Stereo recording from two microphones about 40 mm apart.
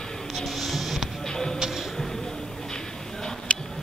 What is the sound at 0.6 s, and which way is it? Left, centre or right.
Music, centre.